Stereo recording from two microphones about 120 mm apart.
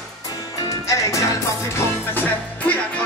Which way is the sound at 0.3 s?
30° left (ahead or behind).